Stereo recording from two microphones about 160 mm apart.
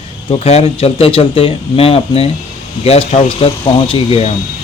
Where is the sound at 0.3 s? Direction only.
40° left (ahead or behind).